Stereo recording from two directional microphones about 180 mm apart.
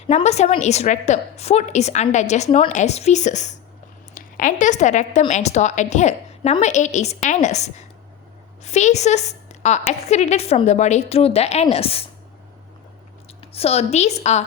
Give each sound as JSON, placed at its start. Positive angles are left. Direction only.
{"t": 0.1, "sound": "a woman's voice", "side_deg": 40}
{"t": 13.4, "sound": "a woman's voice", "side_deg": 35}